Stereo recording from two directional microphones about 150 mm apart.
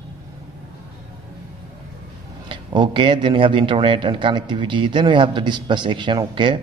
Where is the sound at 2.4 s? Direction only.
35° right (ahead or behind).